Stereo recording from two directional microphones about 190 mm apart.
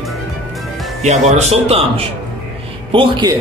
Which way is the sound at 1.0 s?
35° right (ahead or behind).